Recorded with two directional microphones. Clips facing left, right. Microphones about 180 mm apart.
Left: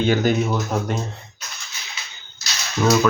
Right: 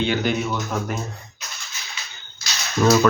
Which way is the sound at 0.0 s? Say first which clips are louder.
Left 3 dB; 45° left (ahead or behind).